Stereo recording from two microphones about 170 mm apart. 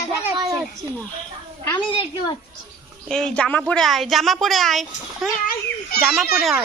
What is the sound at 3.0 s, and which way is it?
A woman's voice, 5° left (ahead or behind).